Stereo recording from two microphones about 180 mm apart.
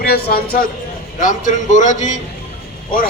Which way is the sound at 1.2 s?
45° left (ahead or behind).